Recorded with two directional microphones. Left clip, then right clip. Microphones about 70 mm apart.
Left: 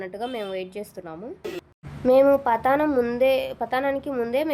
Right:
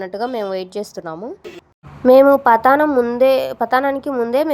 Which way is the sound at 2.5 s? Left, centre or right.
Right.